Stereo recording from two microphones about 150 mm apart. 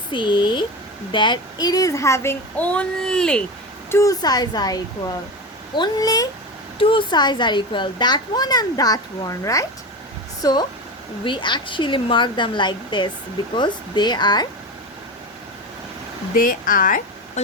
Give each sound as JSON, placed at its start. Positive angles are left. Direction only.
{"t": 0.1, "sound": "a woman's voice", "side_deg": 30}
{"t": 3.9, "sound": "speech", "side_deg": 25}
{"t": 6.7, "sound": "a woman's voice", "side_deg": 35}
{"t": 16.3, "sound": "speech", "side_deg": 70}